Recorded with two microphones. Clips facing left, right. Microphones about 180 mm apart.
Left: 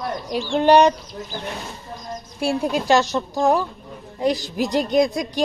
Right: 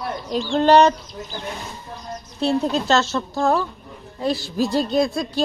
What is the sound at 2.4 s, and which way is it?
A woman's voice, 10° left (ahead or behind).